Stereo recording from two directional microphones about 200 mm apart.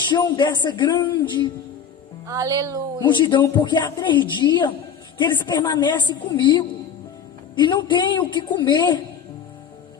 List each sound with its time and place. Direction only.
0.1 s a woman's voice: 20° left (ahead or behind)
2.2 s speech: 15° right (ahead or behind)
3.1 s a woman's voice: 25° left (ahead or behind)